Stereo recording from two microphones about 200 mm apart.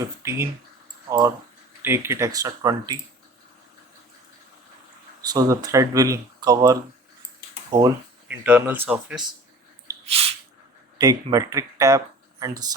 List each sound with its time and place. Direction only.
0.0 s speech: 15° right (ahead or behind)
1.8 s speech: 10° right (ahead or behind)
5.2 s speech: 20° right (ahead or behind)
8.3 s speech: 10° right (ahead or behind)
10.1 s sneeze: 30° right (ahead or behind)
10.9 s speech: 20° right (ahead or behind)